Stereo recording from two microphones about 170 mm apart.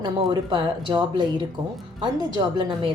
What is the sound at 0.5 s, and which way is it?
Speech, 30° right (ahead or behind).